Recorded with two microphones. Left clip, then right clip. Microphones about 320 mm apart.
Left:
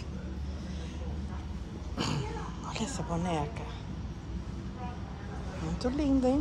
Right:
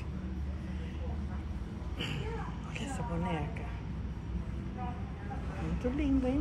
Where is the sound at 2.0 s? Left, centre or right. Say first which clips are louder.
Left 5 dB; left.